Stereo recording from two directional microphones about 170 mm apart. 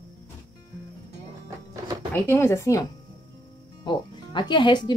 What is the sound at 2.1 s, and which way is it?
Speech, 15° left (ahead or behind).